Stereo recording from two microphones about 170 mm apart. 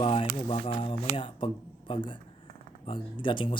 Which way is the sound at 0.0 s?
35° left (ahead or behind).